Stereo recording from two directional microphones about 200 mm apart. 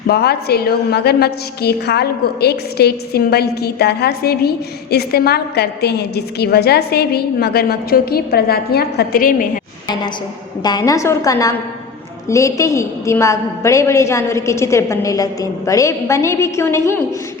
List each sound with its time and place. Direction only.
0.1 s a woman's voice: 50° left (ahead or behind)
10.6 s a woman's voice: 20° left (ahead or behind)